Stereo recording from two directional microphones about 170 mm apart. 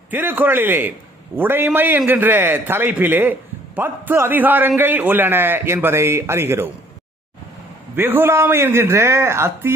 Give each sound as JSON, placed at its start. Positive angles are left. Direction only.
{"t": 0.1, "sound": "a man's voice", "side_deg": -10}
{"t": 7.9, "sound": "a man's voice", "side_deg": -10}